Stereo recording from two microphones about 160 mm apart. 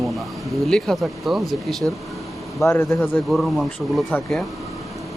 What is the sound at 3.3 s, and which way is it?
Speech, centre (ahead or behind).